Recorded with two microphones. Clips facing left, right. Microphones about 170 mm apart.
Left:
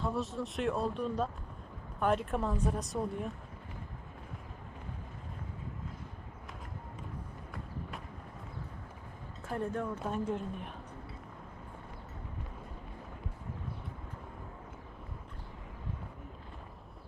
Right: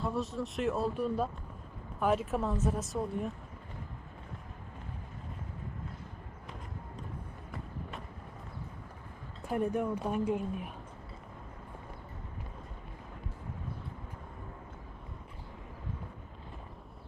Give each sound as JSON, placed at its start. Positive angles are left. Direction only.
{"t": 0.0, "sound": "speech", "side_deg": 0}
{"t": 7.5, "sound": "run", "side_deg": 0}
{"t": 9.5, "sound": "speech", "side_deg": -15}